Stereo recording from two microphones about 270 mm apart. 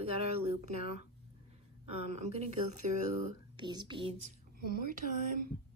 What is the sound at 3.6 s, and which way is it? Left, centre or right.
Speech, centre.